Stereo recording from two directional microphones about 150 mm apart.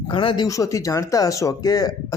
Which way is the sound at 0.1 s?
35° left (ahead or behind).